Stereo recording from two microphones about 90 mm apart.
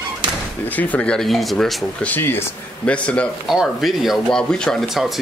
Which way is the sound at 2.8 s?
15° left (ahead or behind).